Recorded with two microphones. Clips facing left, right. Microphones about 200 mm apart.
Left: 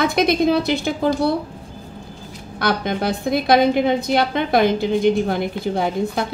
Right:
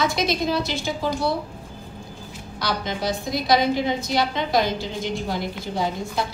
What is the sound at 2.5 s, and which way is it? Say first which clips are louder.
A woman's voice: left 6 dB; 55° left (ahead or behind).